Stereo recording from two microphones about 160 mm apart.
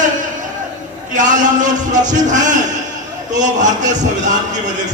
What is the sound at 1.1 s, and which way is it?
A man's voice, 50° right (ahead or behind).